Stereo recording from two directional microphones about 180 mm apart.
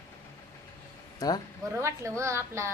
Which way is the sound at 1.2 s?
20° left (ahead or behind).